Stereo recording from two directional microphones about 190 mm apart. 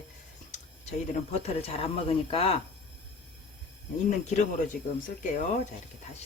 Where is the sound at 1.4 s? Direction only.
30° left (ahead or behind).